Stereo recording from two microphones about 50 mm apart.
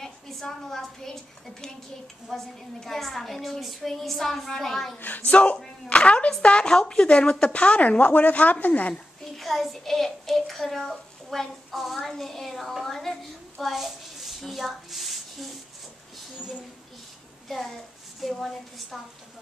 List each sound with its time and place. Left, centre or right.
0.0 s a woman's voice: centre
2.2 s a woman's voice: centre
4.9 s speech: left
9.4 s a child's voice: centre
17.5 s a child's voice: centre